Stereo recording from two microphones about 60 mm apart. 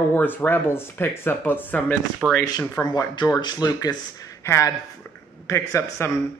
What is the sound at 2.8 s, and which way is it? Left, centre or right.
Speech, left.